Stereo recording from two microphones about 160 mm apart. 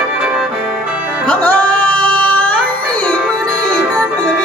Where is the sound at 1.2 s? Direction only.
10° left (ahead or behind).